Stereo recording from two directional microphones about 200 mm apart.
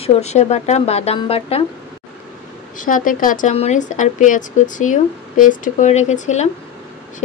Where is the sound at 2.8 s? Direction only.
40° left (ahead or behind).